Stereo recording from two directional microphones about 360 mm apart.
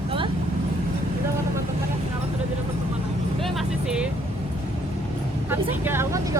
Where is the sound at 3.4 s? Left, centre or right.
Centre.